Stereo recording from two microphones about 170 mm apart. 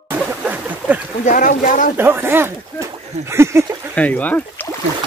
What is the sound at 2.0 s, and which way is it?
Speech, 15° right (ahead or behind).